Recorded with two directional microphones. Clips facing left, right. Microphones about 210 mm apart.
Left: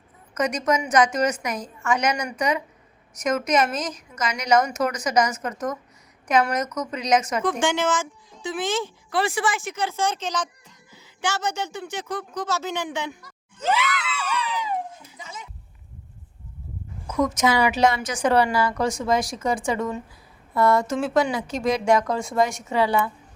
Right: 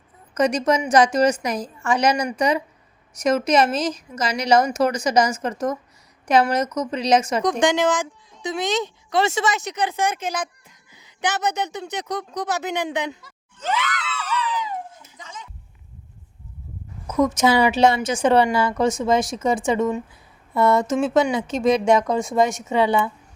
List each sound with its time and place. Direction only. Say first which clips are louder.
0.3 s a woman's voice: right 4 dB; 30° right (ahead or behind)
7.6 s a woman's voice: right 4 dB; 15° right (ahead or behind)
13.7 s screaming: left 1 dB; 10° left (ahead or behind)
15.2 s a sound: even; 10° left (ahead or behind)
17.2 s a woman's voice: right 3 dB; 30° right (ahead or behind)